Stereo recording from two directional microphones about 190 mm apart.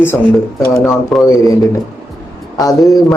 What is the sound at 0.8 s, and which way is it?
Speech, 5° right (ahead or behind).